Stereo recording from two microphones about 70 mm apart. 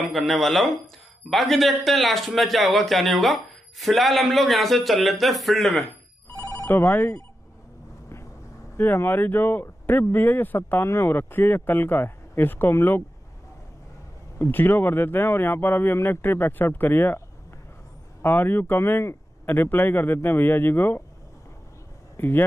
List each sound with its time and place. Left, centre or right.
0.1 s a man's voice: centre
6.3 s telephone bell ringing: left
6.6 s speech: left
8.7 s speech: left
14.4 s speech: left
18.2 s speech: left
22.1 s a sound: left